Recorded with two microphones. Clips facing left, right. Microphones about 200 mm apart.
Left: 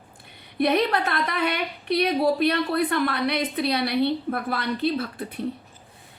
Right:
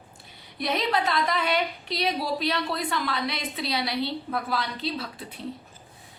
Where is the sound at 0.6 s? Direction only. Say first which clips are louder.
Left 5 dB; 60° left (ahead or behind).